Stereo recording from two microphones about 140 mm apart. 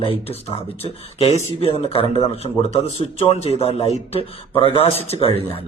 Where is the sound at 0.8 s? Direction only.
45° left (ahead or behind).